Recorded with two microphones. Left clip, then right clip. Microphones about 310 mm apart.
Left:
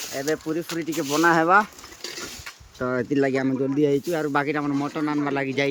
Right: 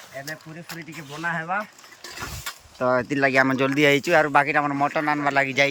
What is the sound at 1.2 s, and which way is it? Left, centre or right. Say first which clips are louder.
Speech: left 9 dB; centre.